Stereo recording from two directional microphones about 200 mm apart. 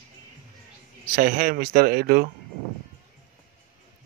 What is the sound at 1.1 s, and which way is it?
Speech, 45° right (ahead or behind).